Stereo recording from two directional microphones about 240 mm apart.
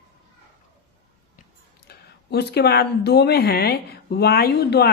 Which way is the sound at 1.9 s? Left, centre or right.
Left.